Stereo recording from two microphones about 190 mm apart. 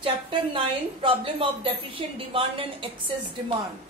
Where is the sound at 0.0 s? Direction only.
25° right (ahead or behind).